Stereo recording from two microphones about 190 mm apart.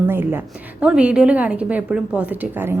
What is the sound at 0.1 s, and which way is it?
A woman's voice, 10° right (ahead or behind).